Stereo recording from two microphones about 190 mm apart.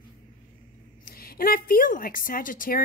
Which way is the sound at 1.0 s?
50° left (ahead or behind).